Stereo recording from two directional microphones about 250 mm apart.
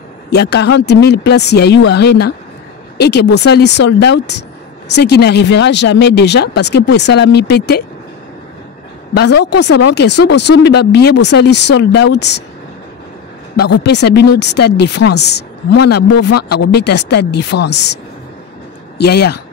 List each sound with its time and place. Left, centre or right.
0.3 s speech: left
9.4 s speech: left
13.7 s speech: left
18.9 s speech: left